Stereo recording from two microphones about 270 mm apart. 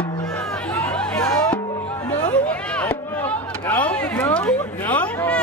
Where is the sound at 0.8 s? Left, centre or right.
Centre.